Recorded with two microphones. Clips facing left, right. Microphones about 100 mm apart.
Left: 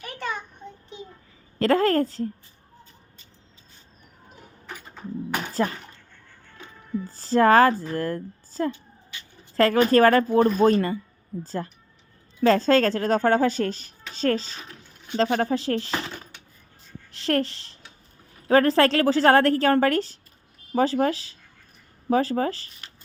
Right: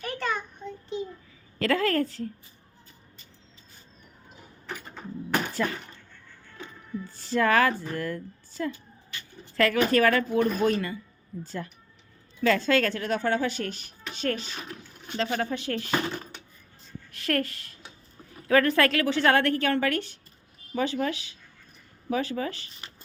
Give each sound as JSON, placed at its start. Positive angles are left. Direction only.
{"t": 0.6, "sound": "child singing", "side_deg": 20}
{"t": 1.5, "sound": "speech", "side_deg": 35}
{"t": 4.6, "sound": "a sound", "side_deg": 10}
{"t": 5.6, "sound": "speech", "side_deg": 30}
{"t": 7.0, "sound": "speech", "side_deg": 35}
{"t": 17.1, "sound": "speech", "side_deg": 25}